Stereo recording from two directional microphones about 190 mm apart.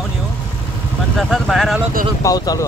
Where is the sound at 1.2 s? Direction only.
Centre (ahead or behind).